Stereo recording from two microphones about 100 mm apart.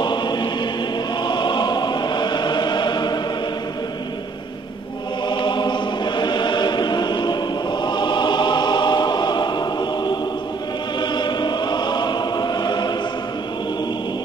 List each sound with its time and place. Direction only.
0.0 s choir: 50° left (ahead or behind)
5.3 s choir: 50° left (ahead or behind)